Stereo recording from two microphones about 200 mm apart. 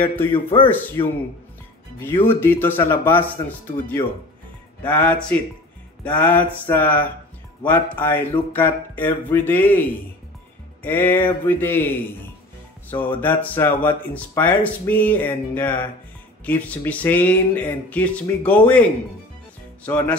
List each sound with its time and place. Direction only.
0.0 s speech: 10° left (ahead or behind)
0.3 s a man's voice: 25° left (ahead or behind)
2.2 s speech: 10° left (ahead or behind)
13.1 s speech: 10° left (ahead or behind)
19.8 s speech: 5° left (ahead or behind)